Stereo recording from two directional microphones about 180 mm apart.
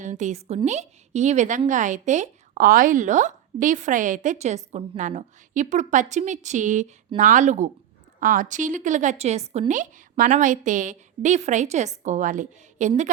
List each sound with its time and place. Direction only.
0.0 s a woman's voice: 45° right (ahead or behind)